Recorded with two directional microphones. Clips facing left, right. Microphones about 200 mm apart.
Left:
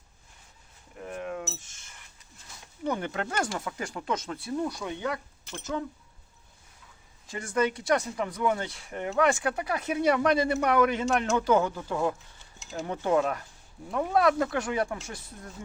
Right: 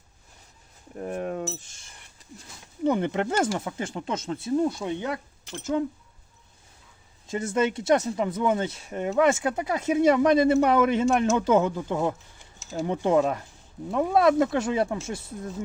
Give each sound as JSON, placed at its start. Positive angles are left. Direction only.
{"t": 0.9, "sound": "cutlery", "side_deg": -40}
{"t": 2.8, "sound": "speech", "side_deg": -20}
{"t": 7.3, "sound": "speech", "side_deg": -25}